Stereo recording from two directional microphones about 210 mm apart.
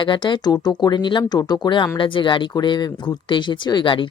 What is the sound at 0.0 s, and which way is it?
Speech, 20° left (ahead or behind).